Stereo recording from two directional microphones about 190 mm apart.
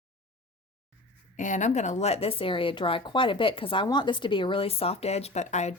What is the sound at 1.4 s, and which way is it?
Speech, 40° left (ahead or behind).